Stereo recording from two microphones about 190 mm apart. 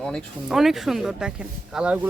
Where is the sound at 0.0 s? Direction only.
Centre (ahead or behind).